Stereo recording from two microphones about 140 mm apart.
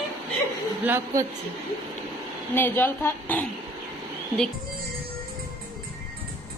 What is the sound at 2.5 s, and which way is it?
Speech, 15° left (ahead or behind).